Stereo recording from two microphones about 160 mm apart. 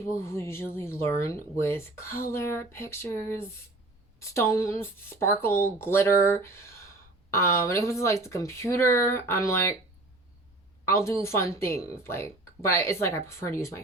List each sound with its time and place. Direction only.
0.1 s speech: 15° left (ahead or behind)
10.8 s speech: 15° left (ahead or behind)